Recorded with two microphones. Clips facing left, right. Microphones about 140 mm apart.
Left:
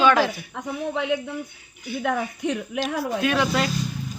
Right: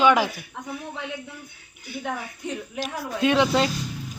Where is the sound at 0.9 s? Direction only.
90° left.